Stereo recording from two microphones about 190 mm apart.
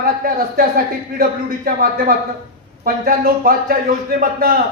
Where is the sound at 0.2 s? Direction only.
50° right (ahead or behind).